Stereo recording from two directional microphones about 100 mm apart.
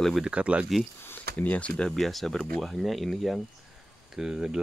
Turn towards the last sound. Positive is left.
turn(degrees=-5)  # may be behind; listen again after turning